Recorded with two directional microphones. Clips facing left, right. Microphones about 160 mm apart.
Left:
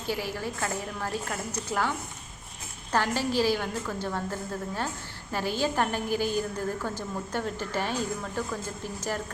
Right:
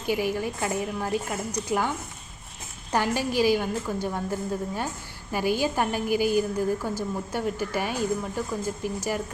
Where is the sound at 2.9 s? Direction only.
15° right (ahead or behind).